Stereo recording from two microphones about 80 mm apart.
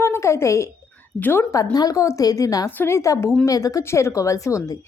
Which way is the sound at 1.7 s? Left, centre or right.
Left.